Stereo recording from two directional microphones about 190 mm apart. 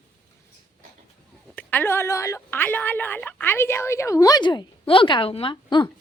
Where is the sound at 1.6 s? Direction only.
10° left (ahead or behind).